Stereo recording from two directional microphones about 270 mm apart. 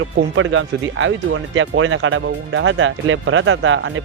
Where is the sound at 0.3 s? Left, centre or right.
Right.